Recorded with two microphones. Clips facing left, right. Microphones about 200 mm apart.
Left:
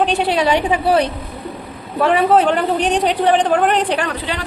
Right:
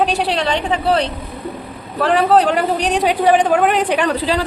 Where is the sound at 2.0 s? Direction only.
Centre (ahead or behind).